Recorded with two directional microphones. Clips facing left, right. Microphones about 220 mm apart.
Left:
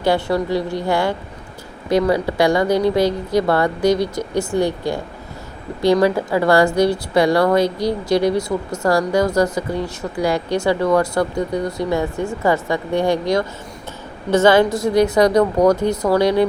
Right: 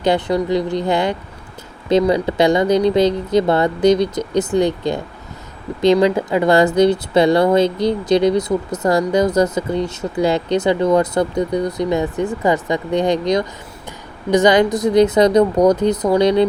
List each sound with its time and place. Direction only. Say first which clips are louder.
0.0 s a woman's voice: right 1 dB; 20° right (ahead or behind)